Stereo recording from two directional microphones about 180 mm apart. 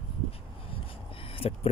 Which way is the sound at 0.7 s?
30° left (ahead or behind).